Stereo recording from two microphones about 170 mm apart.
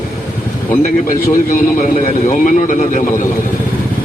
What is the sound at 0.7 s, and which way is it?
A man's voice, 50° left (ahead or behind).